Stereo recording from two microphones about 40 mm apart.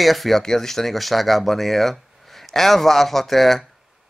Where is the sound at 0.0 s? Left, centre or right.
Centre.